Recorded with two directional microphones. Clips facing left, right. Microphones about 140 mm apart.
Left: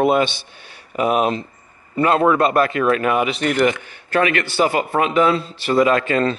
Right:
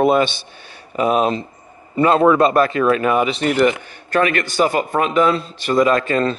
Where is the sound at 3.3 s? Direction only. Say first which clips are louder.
Right 2 dB; 30° right (ahead or behind).